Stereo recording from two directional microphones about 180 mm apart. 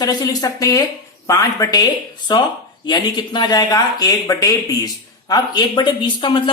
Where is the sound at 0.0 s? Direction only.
20° left (ahead or behind).